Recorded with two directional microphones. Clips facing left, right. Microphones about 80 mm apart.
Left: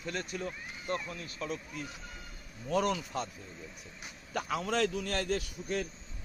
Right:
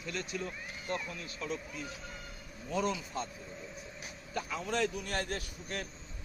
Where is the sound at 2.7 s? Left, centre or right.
Left.